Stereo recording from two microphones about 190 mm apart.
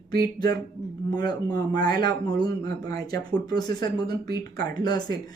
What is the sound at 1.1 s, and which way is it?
Speech, 20° left (ahead or behind).